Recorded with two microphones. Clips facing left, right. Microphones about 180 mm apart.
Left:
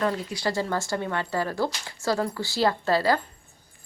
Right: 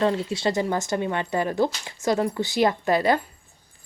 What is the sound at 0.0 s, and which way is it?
Speech, 25° right (ahead or behind).